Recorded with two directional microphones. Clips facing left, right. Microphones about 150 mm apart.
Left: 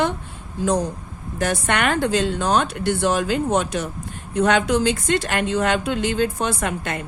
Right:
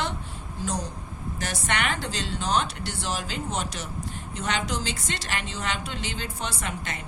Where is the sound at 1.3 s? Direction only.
55° left (ahead or behind).